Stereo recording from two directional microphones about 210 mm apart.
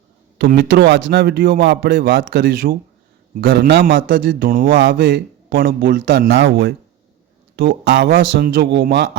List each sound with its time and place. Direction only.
0.3 s a man's voice: 50° right (ahead or behind)
4.7 s a man's voice: 60° right (ahead or behind); by 6.1 s 40° right (ahead or behind)
6.1 s a man's voice: 60° right (ahead or behind)